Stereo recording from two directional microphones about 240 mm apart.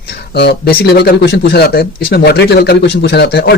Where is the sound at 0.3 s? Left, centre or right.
Left.